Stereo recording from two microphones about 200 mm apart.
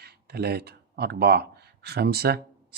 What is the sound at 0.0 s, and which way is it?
Speech, 50° right (ahead or behind).